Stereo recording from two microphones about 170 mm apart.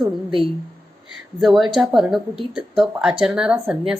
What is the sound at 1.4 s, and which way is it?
A woman's voice, centre (ahead or behind).